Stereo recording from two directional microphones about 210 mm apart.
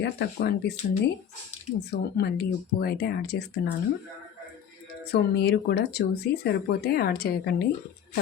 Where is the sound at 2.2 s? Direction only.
45° left (ahead or behind).